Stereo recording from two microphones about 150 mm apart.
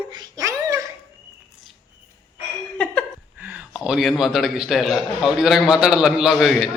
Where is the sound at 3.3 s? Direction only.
10° right (ahead or behind).